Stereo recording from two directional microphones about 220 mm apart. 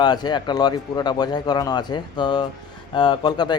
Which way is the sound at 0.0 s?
20° left (ahead or behind).